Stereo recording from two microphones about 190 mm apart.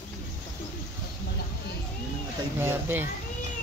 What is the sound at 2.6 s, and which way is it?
Speech, 10° right (ahead or behind).